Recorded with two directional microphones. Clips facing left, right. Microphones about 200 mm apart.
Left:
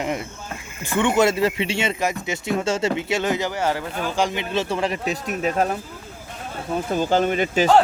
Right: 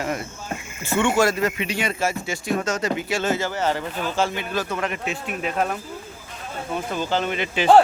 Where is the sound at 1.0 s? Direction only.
20° left (ahead or behind).